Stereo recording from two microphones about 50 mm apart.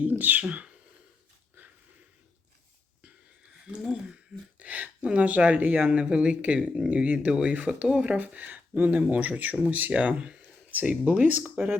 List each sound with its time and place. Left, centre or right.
0.0 s speech: right
4.6 s speech: right
8.1 s speech: right
10.7 s speech: right